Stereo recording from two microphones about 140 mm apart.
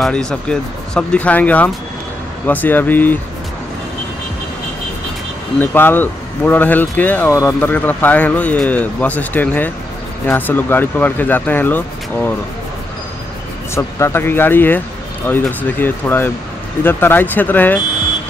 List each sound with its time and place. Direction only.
0.0 s speech: 5° left (ahead or behind)
5.6 s speech: 15° left (ahead or behind)
13.7 s speech: 20° left (ahead or behind)